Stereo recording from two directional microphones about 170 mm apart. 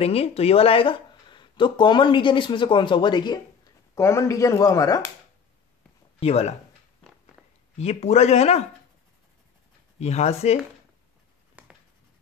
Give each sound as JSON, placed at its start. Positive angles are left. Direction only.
{"t": 0.0, "sound": "speech", "side_deg": 35}
{"t": 6.1, "sound": "speech", "side_deg": 40}
{"t": 7.7, "sound": "speech", "side_deg": 40}
{"t": 9.9, "sound": "speech", "side_deg": 40}
{"t": 11.6, "sound": "writing", "side_deg": -10}